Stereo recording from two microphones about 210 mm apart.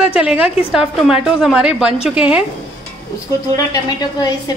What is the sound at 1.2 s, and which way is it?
A woman's voice, centre (ahead or behind).